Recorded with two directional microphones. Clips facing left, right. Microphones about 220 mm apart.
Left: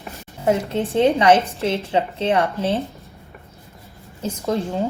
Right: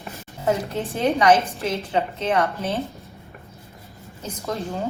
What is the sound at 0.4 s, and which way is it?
A woman's voice, 25° left (ahead or behind).